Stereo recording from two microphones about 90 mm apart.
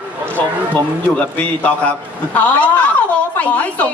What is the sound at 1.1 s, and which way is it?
Speech, 15° left (ahead or behind).